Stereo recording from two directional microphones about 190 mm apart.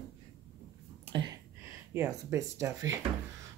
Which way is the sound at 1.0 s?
25° right (ahead or behind).